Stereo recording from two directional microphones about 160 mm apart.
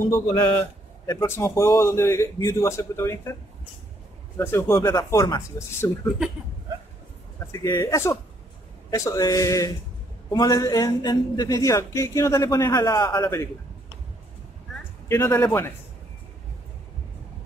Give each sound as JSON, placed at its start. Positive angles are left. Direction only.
{"t": 0.3, "sound": "a man's voice", "side_deg": 15}
{"t": 4.4, "sound": "a man's voice", "side_deg": 15}
{"t": 7.6, "sound": "a man's voice", "side_deg": 25}
{"t": 15.0, "sound": "a man's voice", "side_deg": 15}